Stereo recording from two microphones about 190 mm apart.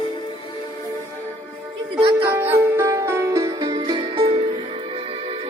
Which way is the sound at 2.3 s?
10° right (ahead or behind).